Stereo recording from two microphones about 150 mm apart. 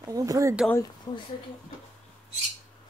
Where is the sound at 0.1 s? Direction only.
25° right (ahead or behind).